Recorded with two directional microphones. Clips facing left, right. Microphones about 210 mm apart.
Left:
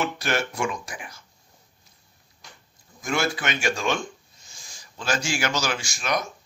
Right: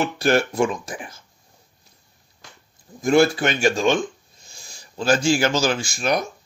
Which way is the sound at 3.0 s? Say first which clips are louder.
Right 10 dB; 35° right (ahead or behind).